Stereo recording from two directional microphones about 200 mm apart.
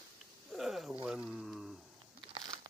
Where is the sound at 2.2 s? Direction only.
25° right (ahead or behind).